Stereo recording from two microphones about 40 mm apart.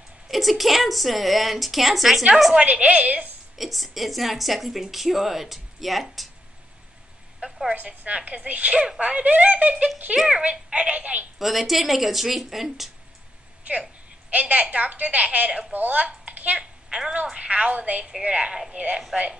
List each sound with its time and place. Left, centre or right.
0.3 s speech: centre
2.5 s a woman's voice: right
3.5 s speech: centre
7.3 s a sound: centre
7.7 s a woman's voice: right
11.3 s speech: centre
14.3 s a woman's voice: right
15.7 s speech: right
16.1 s a sound: right
16.5 s a sound: centre
17.3 s a woman's voice: right